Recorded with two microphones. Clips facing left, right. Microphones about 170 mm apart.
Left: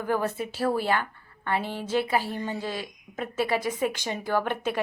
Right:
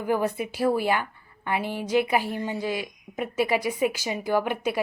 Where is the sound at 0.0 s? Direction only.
15° right (ahead or behind).